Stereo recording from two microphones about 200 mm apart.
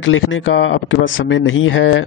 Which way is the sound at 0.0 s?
75° left (ahead or behind).